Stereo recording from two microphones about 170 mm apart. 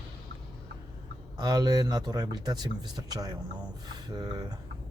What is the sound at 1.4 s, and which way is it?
Speech, 25° right (ahead or behind).